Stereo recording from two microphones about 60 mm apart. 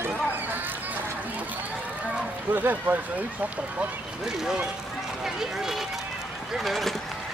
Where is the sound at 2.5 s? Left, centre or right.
Right.